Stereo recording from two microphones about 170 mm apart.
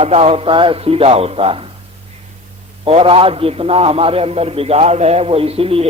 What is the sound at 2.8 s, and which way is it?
A man's voice, 35° right (ahead or behind).